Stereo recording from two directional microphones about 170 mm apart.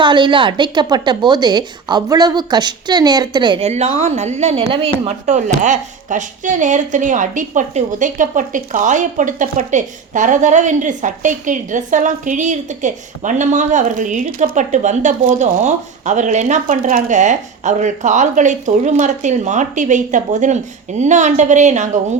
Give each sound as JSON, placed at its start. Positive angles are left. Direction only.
{"t": 0.0, "sound": "a woman's voice", "side_deg": -25}